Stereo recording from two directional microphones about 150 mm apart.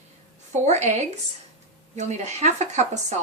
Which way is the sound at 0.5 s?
50° right (ahead or behind).